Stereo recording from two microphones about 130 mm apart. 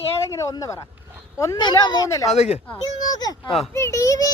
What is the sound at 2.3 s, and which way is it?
Speech, 55° left (ahead or behind).